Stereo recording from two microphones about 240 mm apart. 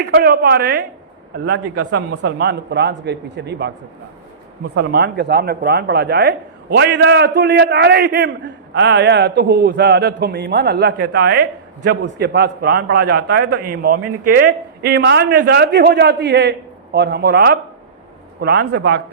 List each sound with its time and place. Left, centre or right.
0.0 s speech: right
4.7 s speech: right